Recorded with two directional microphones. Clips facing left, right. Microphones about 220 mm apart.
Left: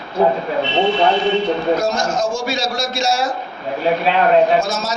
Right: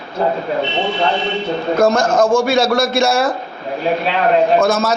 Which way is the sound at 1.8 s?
55° right (ahead or behind).